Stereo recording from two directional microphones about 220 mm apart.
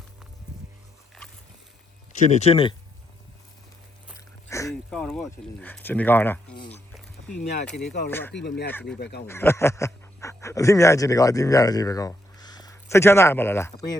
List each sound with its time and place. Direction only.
2.1 s speech: 35° left (ahead or behind)
4.4 s a sound: 15° left (ahead or behind)
7.7 s speech: 5° left (ahead or behind)
8.4 s speech: 50° left (ahead or behind)
8.7 s speech: 5° left (ahead or behind)
9.0 s speech: 50° left (ahead or behind)
9.2 s speech: 10° left (ahead or behind)